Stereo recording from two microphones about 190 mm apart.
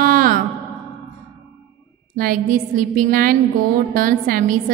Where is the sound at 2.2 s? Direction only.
45° right (ahead or behind).